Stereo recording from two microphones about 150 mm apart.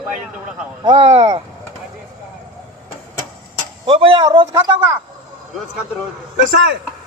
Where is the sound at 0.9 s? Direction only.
35° right (ahead or behind).